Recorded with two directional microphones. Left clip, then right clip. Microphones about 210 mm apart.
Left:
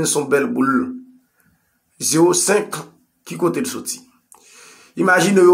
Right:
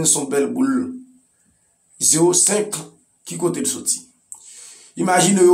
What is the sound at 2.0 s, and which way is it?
Speech, 20° left (ahead or behind).